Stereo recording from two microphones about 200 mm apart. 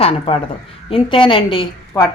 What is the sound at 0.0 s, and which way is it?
A woman's voice, 30° left (ahead or behind).